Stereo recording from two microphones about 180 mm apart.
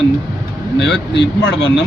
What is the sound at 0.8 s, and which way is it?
Speech, 75° left (ahead or behind).